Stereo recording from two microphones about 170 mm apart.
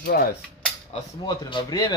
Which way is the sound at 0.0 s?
65° left (ahead or behind).